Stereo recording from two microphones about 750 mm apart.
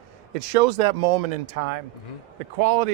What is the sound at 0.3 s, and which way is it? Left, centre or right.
Speech, right.